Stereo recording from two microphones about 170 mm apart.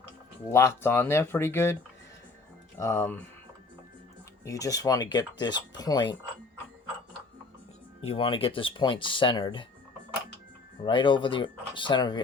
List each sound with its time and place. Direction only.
0.5 s speech: 15° left (ahead or behind)
2.7 s speech: 15° left (ahead or behind)
4.4 s speech: 20° left (ahead or behind)
8.0 s speech: 35° left (ahead or behind)
10.8 s speech: 30° left (ahead or behind)